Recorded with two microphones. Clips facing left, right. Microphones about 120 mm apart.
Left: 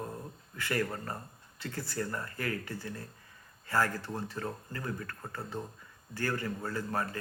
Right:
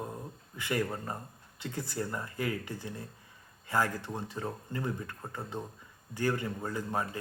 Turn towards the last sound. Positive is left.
turn(degrees=-15)  # may be behind; listen again after turning